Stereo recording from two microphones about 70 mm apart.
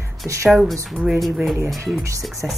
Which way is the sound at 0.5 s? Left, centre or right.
Centre.